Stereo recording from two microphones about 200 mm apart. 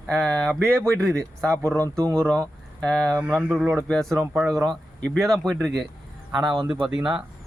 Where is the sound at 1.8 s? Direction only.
15° right (ahead or behind).